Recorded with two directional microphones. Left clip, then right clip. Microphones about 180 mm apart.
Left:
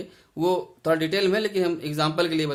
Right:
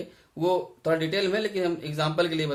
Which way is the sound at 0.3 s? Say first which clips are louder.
Left 1 dB; 45° left (ahead or behind).